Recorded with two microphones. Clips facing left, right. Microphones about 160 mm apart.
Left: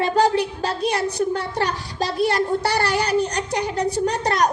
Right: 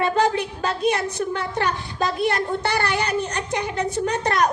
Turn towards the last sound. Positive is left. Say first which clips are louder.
# left 1 dB
turn(degrees=35)  # may be behind; listen again after turning